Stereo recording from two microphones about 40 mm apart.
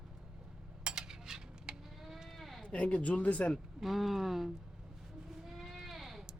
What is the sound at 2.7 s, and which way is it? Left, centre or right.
Speech, left.